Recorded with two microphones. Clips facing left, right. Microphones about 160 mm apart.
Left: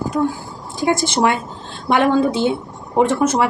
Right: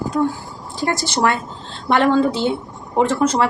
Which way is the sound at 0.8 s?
10° left (ahead or behind).